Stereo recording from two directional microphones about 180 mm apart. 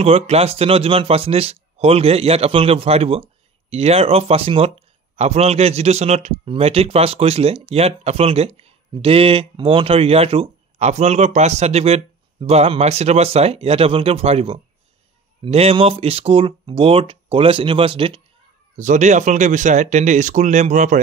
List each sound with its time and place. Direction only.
0.0 s speech: 35° right (ahead or behind)
18.8 s speech: 45° right (ahead or behind)